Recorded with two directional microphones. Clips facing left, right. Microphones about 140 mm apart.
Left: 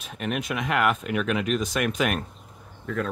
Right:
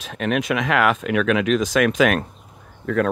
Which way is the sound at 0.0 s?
90° right.